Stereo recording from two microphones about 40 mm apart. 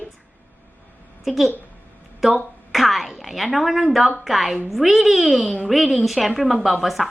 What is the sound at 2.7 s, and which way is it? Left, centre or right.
A woman's voice, centre.